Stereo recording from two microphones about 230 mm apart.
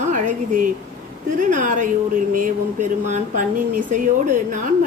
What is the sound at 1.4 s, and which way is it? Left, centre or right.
A woman's voice, right.